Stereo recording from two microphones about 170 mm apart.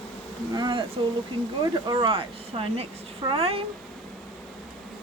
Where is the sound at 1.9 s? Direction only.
30° right (ahead or behind).